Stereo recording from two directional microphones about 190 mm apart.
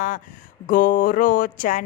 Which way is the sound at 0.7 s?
45° left (ahead or behind).